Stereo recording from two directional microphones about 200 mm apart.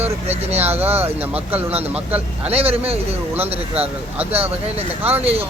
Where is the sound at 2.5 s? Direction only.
30° right (ahead or behind).